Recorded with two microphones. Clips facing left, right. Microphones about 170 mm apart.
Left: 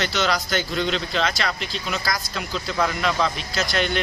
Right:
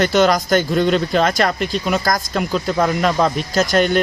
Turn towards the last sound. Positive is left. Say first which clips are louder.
# right 8 dB
turn(degrees=-45)  # may be behind; listen again after turning